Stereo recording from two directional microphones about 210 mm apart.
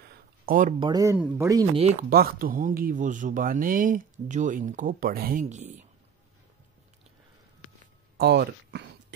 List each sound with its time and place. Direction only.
0.1 s a sound: 40° right (ahead or behind)
0.7 s speech: 20° right (ahead or behind)
1.8 s speech: 30° right (ahead or behind)
2.0 s speech: 45° right (ahead or behind)
8.2 s speech: 50° right (ahead or behind)